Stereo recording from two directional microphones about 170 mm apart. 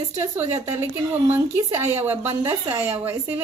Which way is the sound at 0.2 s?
15° right (ahead or behind).